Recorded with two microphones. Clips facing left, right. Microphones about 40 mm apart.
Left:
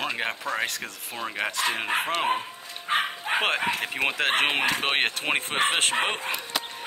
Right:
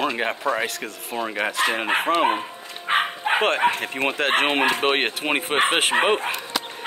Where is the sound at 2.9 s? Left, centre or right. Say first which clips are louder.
Right 4 dB; right.